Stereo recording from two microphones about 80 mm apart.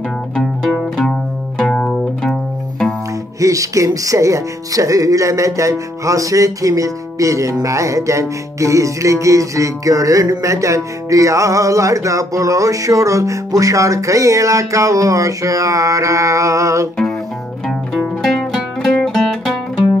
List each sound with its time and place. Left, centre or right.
1.6 s music: centre
3.3 s speech: right
17.6 s music: centre